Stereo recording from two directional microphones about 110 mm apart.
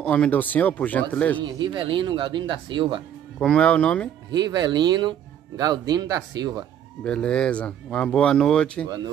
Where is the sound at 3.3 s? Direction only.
5° left (ahead or behind).